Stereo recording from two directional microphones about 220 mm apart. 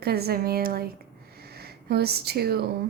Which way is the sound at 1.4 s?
45° right (ahead or behind).